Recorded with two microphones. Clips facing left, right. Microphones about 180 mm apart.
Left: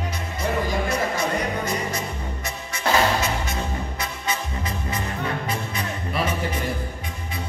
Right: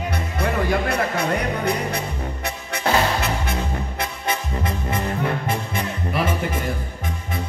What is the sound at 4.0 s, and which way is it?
Music, 55° right (ahead or behind).